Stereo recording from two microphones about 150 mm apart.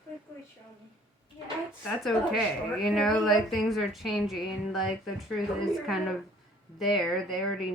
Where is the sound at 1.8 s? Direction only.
Centre (ahead or behind).